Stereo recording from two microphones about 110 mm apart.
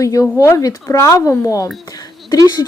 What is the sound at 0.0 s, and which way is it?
Speech, 30° left (ahead or behind).